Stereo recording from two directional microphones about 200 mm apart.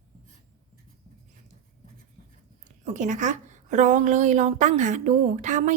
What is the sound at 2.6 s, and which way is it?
A woman's voice, 35° right (ahead or behind).